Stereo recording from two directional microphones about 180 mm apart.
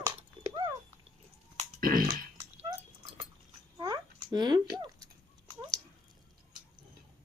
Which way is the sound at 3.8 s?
25° right (ahead or behind).